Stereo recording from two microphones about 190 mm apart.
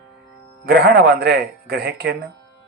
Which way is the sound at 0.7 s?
55° right (ahead or behind).